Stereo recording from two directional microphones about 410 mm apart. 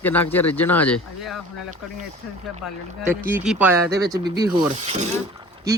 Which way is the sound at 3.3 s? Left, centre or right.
Centre.